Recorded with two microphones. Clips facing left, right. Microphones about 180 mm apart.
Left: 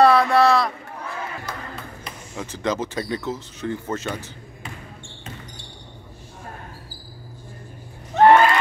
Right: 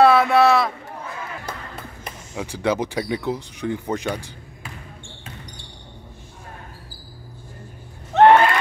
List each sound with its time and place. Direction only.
0.0 s boat: 5° right (ahead or behind)
2.3 s speech: 10° right (ahead or behind)
8.1 s a sound: 65° right (ahead or behind)